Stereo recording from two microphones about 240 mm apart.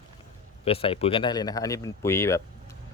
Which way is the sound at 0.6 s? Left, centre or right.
Left.